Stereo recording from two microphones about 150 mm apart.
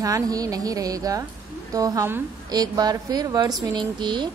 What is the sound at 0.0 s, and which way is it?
A woman's voice, 25° right (ahead or behind).